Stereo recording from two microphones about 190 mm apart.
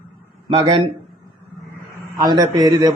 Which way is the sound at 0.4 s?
25° right (ahead or behind).